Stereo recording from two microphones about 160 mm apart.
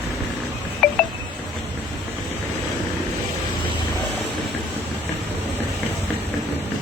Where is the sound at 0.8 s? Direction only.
Centre (ahead or behind).